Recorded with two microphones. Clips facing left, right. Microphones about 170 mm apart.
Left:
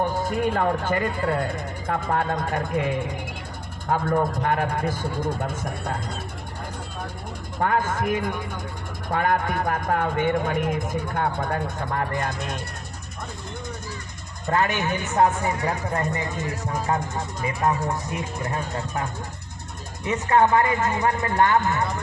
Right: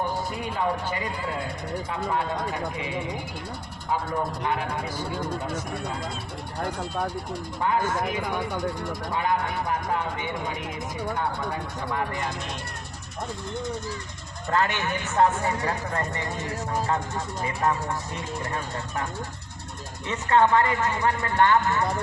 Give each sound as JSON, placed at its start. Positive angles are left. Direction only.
{"t": 0.3, "sound": "speech", "side_deg": 50}
{"t": 7.6, "sound": "speech", "side_deg": 55}
{"t": 14.5, "sound": "speech", "side_deg": 15}
{"t": 17.7, "sound": "speech", "side_deg": 15}
{"t": 20.1, "sound": "speech", "side_deg": 15}